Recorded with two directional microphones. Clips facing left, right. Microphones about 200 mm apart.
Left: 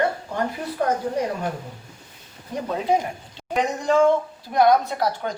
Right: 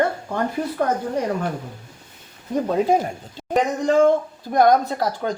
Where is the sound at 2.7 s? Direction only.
40° right (ahead or behind).